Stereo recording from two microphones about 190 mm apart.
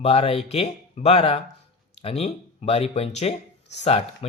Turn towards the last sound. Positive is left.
turn(degrees=30)  # may be behind; listen again after turning